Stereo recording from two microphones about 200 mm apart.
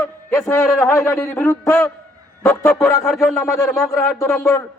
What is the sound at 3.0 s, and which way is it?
Speech, centre (ahead or behind).